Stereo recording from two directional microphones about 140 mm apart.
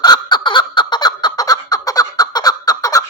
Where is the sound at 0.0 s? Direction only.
30° left (ahead or behind).